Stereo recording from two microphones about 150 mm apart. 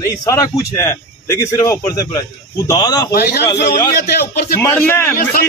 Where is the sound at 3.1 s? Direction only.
90° left.